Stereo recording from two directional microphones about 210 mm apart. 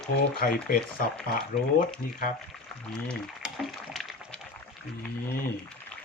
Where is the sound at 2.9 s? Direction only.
Centre (ahead or behind).